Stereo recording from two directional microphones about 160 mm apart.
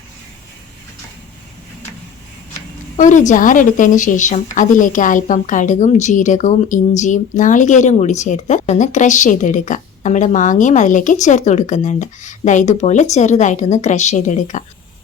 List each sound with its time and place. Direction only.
3.0 s a woman's voice: 50° left (ahead or behind)